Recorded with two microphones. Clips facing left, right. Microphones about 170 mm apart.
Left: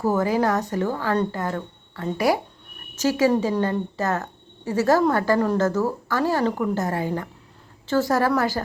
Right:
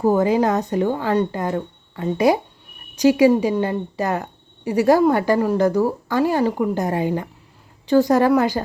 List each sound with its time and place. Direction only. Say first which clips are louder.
0.0 s speech: right 4 dB; 20° right (ahead or behind)